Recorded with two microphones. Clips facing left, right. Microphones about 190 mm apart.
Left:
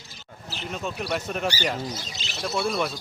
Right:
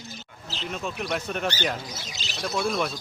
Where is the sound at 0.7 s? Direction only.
Centre (ahead or behind).